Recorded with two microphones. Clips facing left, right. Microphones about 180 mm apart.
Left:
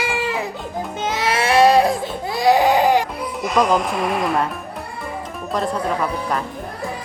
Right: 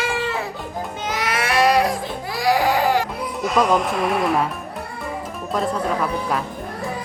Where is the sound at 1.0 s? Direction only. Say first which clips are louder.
Left 4 dB; 25° left (ahead or behind).